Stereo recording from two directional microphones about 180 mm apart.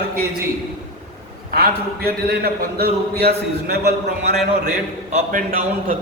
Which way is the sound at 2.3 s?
60° right (ahead or behind).